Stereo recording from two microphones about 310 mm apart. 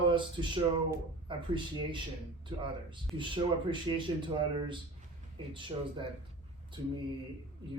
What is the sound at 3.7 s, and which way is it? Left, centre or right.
Speech, centre.